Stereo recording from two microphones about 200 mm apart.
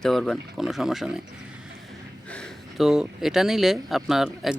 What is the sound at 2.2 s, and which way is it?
Speech, 5° left (ahead or behind).